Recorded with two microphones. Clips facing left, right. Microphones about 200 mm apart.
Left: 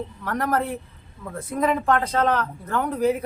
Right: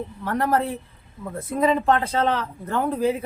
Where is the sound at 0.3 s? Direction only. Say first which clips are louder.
Right 2 dB; 25° right (ahead or behind).